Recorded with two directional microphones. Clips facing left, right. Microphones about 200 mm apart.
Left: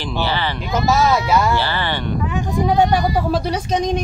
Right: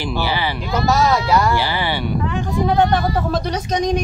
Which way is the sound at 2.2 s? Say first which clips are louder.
Left 1 dB; 15° left (ahead or behind).